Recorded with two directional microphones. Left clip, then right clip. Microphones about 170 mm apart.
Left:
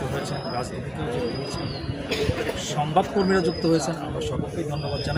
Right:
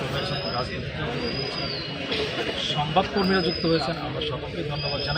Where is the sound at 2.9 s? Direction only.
25° left (ahead or behind).